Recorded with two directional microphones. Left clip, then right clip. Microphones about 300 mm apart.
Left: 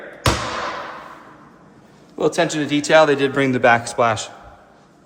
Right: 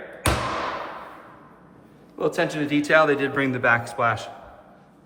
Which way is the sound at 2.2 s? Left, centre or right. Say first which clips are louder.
Left 5 dB; centre.